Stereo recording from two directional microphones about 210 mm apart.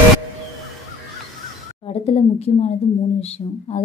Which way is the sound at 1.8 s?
30° left (ahead or behind).